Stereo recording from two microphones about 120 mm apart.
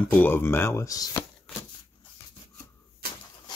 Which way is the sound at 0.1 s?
15° left (ahead or behind).